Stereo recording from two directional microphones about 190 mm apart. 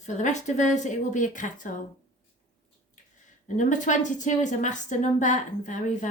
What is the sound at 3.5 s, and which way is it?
A woman's voice, 40° left (ahead or behind).